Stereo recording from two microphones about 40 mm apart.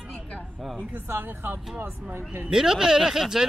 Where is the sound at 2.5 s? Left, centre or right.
Centre.